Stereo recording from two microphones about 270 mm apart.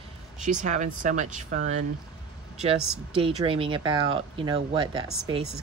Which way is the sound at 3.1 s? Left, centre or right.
Centre.